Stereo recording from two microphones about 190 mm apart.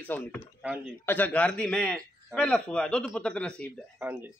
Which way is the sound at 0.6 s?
5° right (ahead or behind).